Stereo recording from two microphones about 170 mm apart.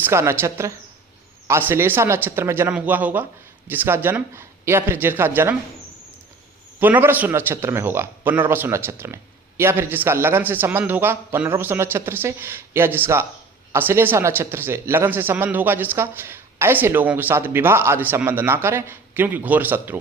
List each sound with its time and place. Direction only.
0.0 s a man's voice: 15° right (ahead or behind)
6.7 s a man's voice: 10° right (ahead or behind)